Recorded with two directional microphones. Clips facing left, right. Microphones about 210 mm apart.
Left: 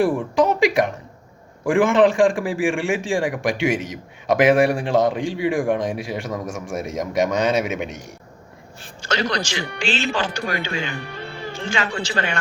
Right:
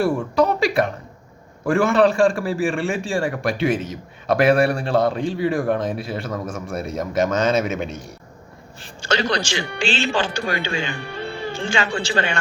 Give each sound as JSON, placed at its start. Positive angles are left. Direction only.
{"t": 0.0, "sound": "a man's voice", "side_deg": 15}
{"t": 9.0, "sound": "speech", "side_deg": -30}